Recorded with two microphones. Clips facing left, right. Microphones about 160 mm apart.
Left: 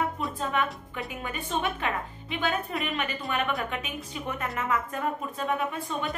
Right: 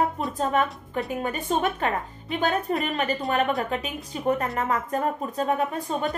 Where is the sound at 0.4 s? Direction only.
40° right (ahead or behind).